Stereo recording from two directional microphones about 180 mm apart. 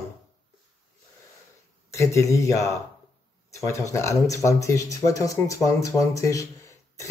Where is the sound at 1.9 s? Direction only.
15° left (ahead or behind).